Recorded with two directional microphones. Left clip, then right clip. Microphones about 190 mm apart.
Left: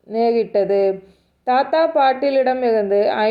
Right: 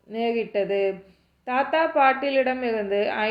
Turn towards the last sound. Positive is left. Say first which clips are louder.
# left 8 dB
turn(degrees=25)  # may be behind; listen again after turning